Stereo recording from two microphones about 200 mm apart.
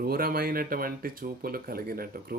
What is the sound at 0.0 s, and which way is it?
Speech, 50° right (ahead or behind).